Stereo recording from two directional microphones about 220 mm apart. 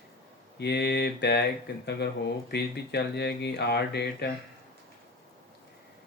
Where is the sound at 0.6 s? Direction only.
50° left (ahead or behind).